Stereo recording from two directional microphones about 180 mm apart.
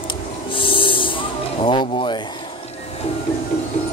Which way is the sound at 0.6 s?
30° left (ahead or behind).